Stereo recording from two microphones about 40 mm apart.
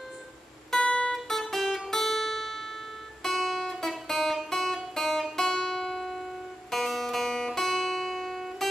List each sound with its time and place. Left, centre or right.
0.7 s music: centre
1.1 s music: centre